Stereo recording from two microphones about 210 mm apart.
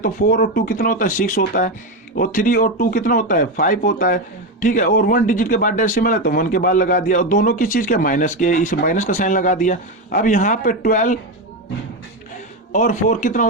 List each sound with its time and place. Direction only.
0.0 s speech: 45° left (ahead or behind)
12.7 s speech: 35° left (ahead or behind)